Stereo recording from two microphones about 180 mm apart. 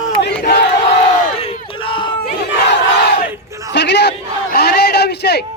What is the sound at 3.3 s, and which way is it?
Battle cry, 15° right (ahead or behind).